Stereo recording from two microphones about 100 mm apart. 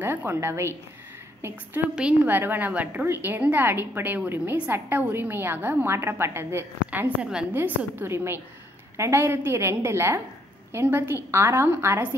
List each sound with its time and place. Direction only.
0.0 s a woman's voice: 20° right (ahead or behind)
2.0 s a woman's voice: 15° right (ahead or behind)
7.5 s a woman's voice: 20° right (ahead or behind)